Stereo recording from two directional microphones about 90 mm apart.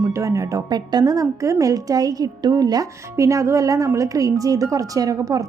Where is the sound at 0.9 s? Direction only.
50° right (ahead or behind).